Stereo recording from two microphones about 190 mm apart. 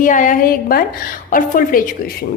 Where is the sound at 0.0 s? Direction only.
45° left (ahead or behind).